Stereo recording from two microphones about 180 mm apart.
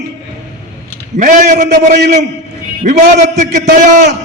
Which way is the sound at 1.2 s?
45° right (ahead or behind).